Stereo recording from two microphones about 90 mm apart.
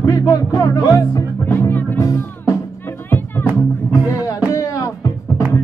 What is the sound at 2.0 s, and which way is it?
Music, 35° left (ahead or behind).